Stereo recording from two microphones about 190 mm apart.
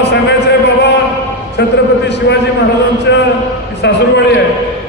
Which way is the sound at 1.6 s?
60° left (ahead or behind).